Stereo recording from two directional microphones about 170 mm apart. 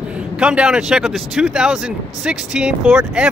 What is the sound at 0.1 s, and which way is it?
Speech, 5° right (ahead or behind).